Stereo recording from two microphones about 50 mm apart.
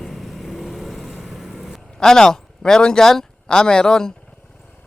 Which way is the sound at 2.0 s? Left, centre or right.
Centre.